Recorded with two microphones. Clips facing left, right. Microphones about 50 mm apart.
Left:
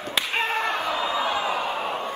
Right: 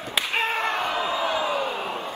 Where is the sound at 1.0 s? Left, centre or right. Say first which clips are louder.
Even; left.